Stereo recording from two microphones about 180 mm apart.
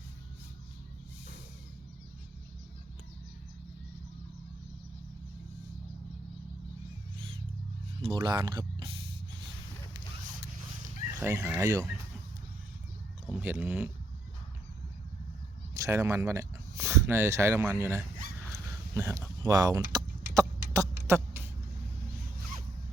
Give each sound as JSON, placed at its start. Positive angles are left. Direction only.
{"t": 8.0, "sound": "speech", "side_deg": -25}
{"t": 11.2, "sound": "speech", "side_deg": -10}
{"t": 13.4, "sound": "speech", "side_deg": -10}
{"t": 15.7, "sound": "speech", "side_deg": -15}
{"t": 18.5, "sound": "goose", "side_deg": -15}
{"t": 19.4, "sound": "a sound", "side_deg": -20}